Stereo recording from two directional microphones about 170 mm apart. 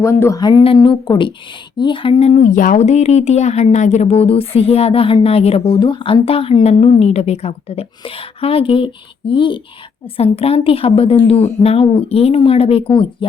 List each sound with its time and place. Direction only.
0.0 s speech: 15° left (ahead or behind)